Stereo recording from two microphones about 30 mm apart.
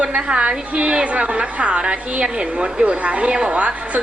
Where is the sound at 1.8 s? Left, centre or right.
Right.